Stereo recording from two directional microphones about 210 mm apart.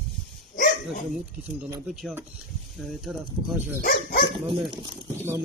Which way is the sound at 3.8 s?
45° left (ahead or behind).